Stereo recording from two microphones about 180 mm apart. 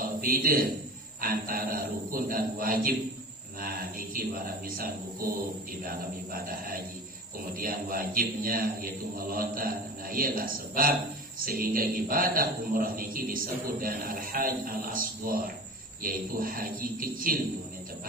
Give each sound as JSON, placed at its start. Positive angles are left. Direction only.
{"t": 0.2, "sound": "a man's voice", "side_deg": -55}
{"t": 7.5, "sound": "a man's voice", "side_deg": -55}